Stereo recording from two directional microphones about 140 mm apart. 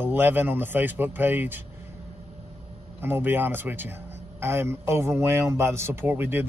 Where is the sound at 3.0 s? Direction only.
15° right (ahead or behind).